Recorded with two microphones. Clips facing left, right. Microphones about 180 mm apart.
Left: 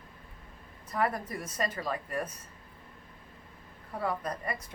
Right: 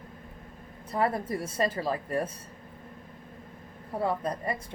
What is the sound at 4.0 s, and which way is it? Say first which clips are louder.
Speech: right 4 dB; 25° right (ahead or behind).